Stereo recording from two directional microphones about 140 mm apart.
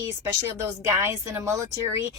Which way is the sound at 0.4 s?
20° right (ahead or behind).